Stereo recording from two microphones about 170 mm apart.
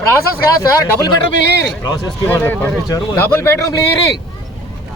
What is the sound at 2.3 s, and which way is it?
Speech, 10° left (ahead or behind).